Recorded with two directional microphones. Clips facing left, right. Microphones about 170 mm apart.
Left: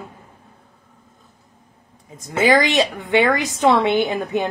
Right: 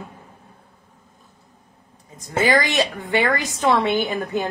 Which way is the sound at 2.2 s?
25° left (ahead or behind).